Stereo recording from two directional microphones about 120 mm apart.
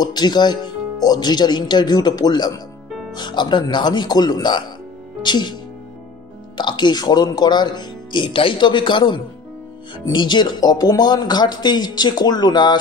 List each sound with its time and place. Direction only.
0.0 s speech: 35° left (ahead or behind)